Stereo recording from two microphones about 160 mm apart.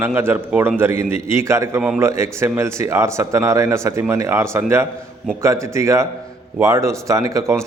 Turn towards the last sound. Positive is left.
turn(degrees=-20)  # may be behind; listen again after turning